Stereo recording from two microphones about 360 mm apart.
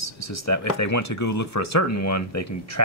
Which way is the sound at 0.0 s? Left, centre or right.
Left.